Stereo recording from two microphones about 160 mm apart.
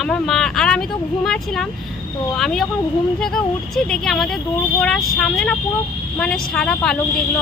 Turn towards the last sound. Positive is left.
turn(degrees=5)  # may be behind; listen again after turning